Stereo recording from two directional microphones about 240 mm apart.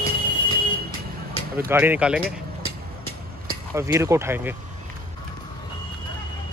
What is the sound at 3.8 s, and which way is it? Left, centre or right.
Speech, centre.